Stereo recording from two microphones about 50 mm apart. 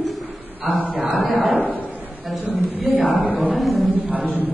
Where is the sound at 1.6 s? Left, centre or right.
Right.